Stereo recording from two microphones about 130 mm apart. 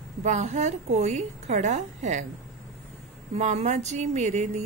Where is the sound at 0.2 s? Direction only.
65° right (ahead or behind).